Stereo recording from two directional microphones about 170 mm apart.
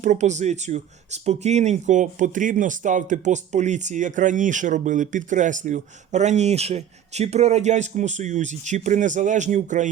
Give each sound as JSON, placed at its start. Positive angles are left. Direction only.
{"t": 0.0, "sound": "speech", "side_deg": -45}